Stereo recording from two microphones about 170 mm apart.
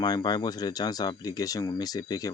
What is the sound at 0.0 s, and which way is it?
Speech, 25° left (ahead or behind).